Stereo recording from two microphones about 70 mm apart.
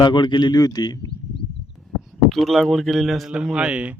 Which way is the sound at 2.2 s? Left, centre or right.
Centre.